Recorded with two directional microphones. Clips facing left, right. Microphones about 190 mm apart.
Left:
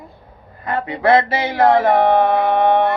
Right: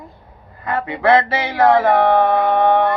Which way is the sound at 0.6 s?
15° left (ahead or behind).